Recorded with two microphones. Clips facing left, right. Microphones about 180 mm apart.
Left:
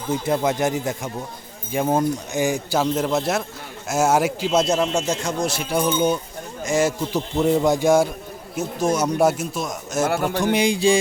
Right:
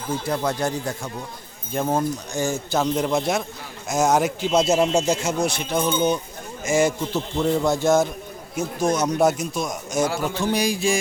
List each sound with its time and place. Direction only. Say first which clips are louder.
0.3 s a man's voice: left 3 dB; 20° left (ahead or behind); by 7.1 s centre (ahead or behind)
7.1 s a man's voice: left 3 dB; 15° left (ahead or behind)
10.1 s a man's voice: left 4 dB; 60° left (ahead or behind)
10.4 s speech: left 3 dB; 25° left (ahead or behind)